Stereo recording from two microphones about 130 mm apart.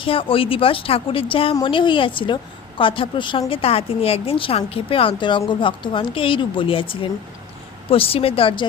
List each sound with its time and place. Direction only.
0.0 s a woman's voice: 45° left (ahead or behind)